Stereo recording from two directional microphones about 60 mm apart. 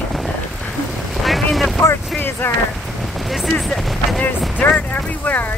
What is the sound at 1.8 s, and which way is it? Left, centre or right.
Speech, left.